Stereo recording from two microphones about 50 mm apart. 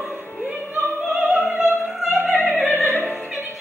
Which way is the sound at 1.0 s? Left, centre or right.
Right.